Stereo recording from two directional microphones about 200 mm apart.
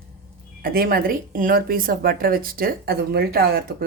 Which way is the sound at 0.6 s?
50° right (ahead or behind).